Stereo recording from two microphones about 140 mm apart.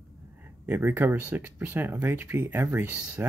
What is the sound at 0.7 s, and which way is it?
Speech, 15° right (ahead or behind).